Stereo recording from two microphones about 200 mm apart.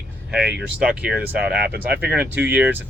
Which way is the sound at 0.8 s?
5° right (ahead or behind).